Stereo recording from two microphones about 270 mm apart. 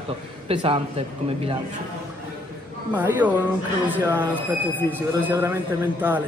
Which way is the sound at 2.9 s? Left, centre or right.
Centre.